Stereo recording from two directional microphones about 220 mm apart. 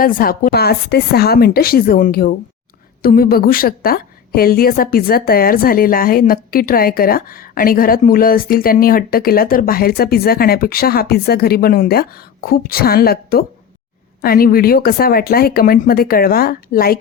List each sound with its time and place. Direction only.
0.0 s a woman's voice: 40° left (ahead or behind)